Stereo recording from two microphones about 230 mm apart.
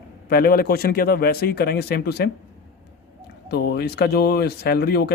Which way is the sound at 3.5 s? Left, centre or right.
Left.